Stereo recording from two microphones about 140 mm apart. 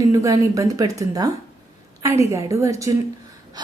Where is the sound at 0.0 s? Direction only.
25° right (ahead or behind).